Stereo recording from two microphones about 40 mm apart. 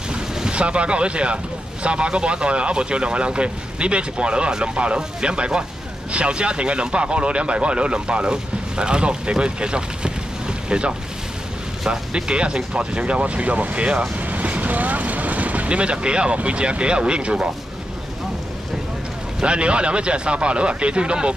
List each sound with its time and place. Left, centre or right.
0.1 s boat: centre
0.6 s speech: right
12.3 s speech: right
14.2 s vehicle: right
16.3 s speech: right
19.4 s speech: right